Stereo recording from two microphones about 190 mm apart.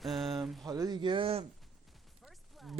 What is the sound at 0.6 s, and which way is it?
Speech, 20° right (ahead or behind).